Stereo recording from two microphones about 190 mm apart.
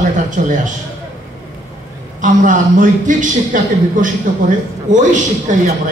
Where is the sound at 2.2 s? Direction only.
45° right (ahead or behind).